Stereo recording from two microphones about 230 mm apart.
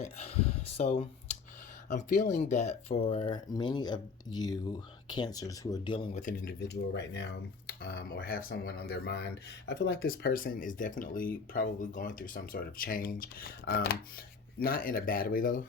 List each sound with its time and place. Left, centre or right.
0.0 s speech: left